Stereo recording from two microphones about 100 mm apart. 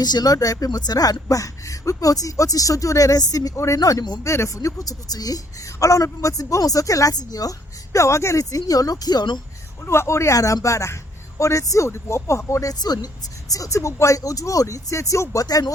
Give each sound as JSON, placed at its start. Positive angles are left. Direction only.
{"t": 0.0, "sound": "a woman's voice", "side_deg": 40}
{"t": 4.2, "sound": "a woman's voice", "side_deg": 30}
{"t": 7.9, "sound": "a woman's voice", "side_deg": 30}
{"t": 9.8, "sound": "a woman's voice", "side_deg": 25}